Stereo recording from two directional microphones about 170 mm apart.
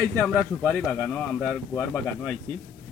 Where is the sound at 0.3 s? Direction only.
Centre (ahead or behind).